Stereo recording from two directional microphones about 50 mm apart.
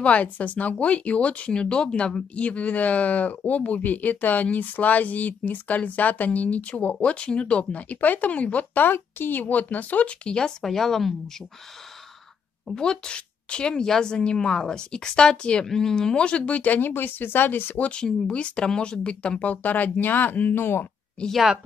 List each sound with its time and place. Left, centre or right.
0.0 s speech: left
8.8 s speech: left; by 10.5 s centre
10.6 s speech: centre
12.6 s speech: centre; by 17.8 s left
18.0 s speech: centre; by 20.5 s left
20.5 s speech: left